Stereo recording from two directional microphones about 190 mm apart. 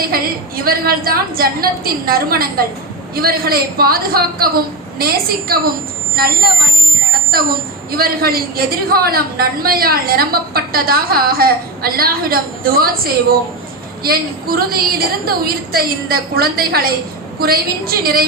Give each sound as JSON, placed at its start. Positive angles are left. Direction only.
{"t": 0.0, "sound": "a woman's voice", "side_deg": -50}
{"t": 7.9, "sound": "a woman's voice", "side_deg": -50}